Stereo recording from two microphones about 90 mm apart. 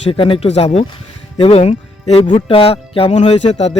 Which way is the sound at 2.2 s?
90° left.